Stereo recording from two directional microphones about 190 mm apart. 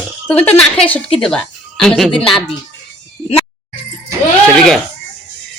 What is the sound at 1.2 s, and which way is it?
Speech, 5° left (ahead or behind).